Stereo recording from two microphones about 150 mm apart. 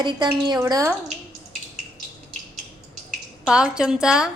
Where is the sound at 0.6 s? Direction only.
20° right (ahead or behind).